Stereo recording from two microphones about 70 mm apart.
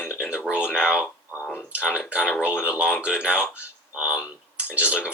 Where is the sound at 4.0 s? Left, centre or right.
Centre.